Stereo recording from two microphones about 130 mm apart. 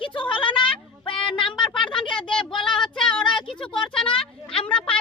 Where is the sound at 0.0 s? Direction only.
40° left (ahead or behind).